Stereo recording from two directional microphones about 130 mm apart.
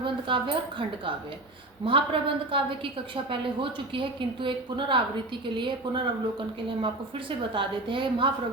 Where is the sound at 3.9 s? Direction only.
40° right (ahead or behind).